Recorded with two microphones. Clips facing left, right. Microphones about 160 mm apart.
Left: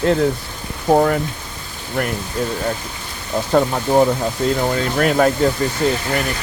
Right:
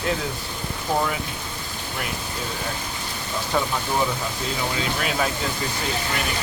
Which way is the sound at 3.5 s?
45° left (ahead or behind).